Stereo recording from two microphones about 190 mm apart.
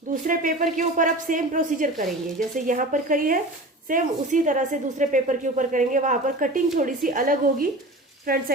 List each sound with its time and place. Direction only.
0.1 s a woman's voice: 45° right (ahead or behind)